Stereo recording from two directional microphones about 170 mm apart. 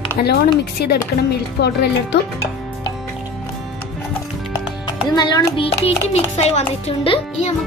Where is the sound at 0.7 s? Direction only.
75° left (ahead or behind).